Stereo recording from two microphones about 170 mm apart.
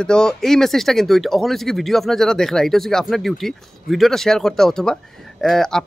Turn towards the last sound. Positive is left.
turn(degrees=5)  # may be behind; listen again after turning